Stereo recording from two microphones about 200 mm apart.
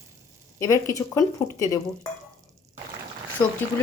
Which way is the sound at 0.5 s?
15° left (ahead or behind).